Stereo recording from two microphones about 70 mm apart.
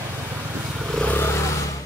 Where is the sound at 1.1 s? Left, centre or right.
Left.